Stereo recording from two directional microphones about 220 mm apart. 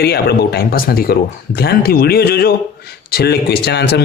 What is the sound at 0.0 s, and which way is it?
Speech, 45° left (ahead or behind).